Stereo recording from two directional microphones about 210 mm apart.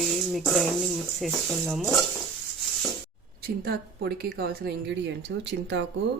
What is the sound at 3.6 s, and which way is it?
A woman's voice, 45° right (ahead or behind).